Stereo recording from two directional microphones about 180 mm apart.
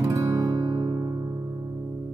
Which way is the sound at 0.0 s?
20° right (ahead or behind).